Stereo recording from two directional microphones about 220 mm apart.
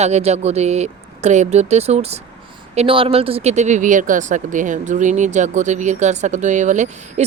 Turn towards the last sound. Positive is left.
turn(degrees=-30)  # may be behind; listen again after turning